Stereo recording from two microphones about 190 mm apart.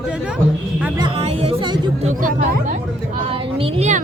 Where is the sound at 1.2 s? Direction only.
30° right (ahead or behind).